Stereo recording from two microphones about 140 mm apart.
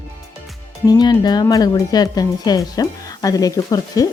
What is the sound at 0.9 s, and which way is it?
Speech, 30° left (ahead or behind).